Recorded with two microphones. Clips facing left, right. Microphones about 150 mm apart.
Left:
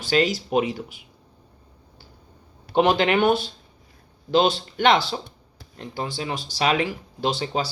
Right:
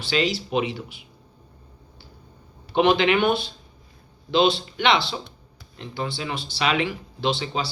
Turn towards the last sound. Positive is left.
turn(degrees=45)  # may be behind; listen again after turning